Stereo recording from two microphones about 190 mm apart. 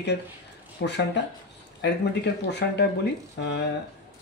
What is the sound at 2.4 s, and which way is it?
Speech, 65° left (ahead or behind).